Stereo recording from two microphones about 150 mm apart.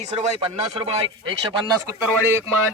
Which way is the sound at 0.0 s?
50° right (ahead or behind).